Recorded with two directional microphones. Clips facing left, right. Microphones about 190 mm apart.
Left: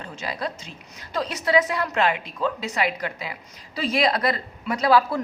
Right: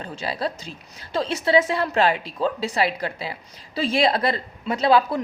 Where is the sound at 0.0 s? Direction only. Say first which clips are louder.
Right 3 dB; 30° right (ahead or behind).